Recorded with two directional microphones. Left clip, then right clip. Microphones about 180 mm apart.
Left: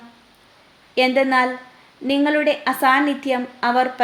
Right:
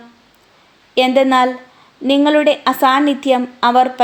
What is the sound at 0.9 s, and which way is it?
A woman's voice, 35° right (ahead or behind).